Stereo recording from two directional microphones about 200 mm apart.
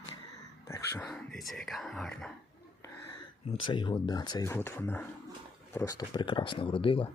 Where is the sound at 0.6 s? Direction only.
15° left (ahead or behind).